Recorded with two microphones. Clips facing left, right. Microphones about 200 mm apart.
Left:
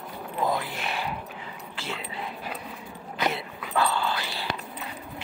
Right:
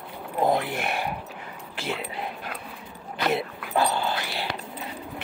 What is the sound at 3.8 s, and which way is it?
Dog, 20° right (ahead or behind).